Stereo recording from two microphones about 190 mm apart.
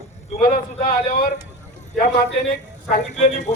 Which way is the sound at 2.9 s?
40° left (ahead or behind).